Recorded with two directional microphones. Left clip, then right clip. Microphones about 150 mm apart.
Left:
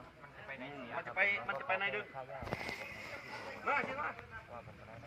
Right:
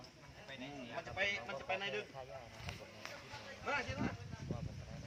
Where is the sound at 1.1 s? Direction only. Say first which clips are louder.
Left 5 dB; 30° right (ahead or behind).